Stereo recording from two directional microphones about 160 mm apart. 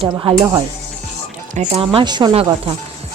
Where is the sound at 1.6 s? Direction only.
40° right (ahead or behind).